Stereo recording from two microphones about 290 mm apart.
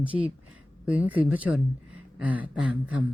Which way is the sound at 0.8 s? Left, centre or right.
Centre.